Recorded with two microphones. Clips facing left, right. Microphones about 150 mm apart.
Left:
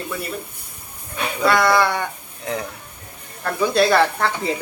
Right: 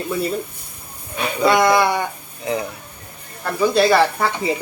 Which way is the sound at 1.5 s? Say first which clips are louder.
Right 2 dB; 15° right (ahead or behind).